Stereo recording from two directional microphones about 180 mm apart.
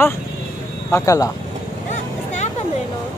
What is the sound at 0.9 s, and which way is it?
Speech, 20° left (ahead or behind).